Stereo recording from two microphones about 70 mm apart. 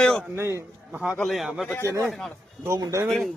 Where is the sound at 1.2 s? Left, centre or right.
Centre.